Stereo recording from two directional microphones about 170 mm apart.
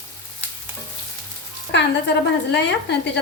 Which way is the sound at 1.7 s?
90° left.